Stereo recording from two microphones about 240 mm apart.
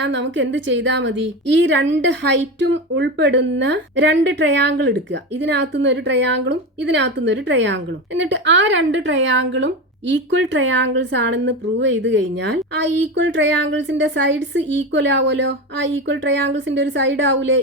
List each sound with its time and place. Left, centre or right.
0.0 s speech: right